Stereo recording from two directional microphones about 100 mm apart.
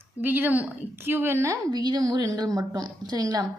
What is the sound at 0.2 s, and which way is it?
A woman's voice, 20° right (ahead or behind).